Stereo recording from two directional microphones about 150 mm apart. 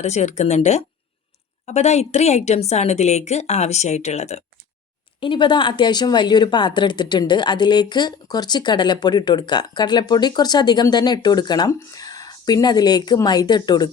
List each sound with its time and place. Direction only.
0.0 s a woman's voice: 50° left (ahead or behind)
5.2 s speech: 35° left (ahead or behind)